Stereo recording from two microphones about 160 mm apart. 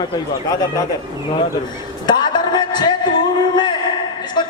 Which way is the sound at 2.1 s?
25° left (ahead or behind).